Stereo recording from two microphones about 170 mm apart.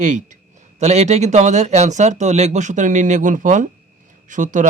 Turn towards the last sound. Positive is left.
turn(degrees=-50)  # may be behind; listen again after turning